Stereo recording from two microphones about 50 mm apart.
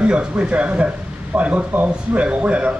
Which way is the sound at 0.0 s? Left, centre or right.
Right.